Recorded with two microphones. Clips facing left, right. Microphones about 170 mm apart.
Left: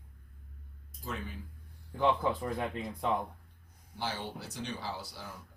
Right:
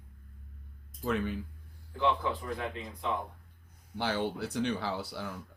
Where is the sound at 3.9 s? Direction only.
65° right (ahead or behind).